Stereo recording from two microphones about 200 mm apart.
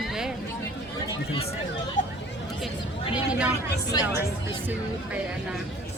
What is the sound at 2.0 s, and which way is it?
Hubbub, 40° left (ahead or behind).